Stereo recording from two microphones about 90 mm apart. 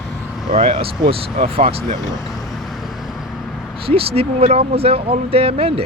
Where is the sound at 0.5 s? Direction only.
75° right (ahead or behind).